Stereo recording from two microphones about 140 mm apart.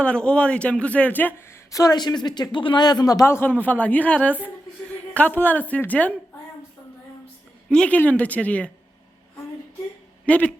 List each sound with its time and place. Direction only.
0.0 s speech: 5° left (ahead or behind)
7.7 s speech: 10° left (ahead or behind)
10.2 s speech: 10° left (ahead or behind)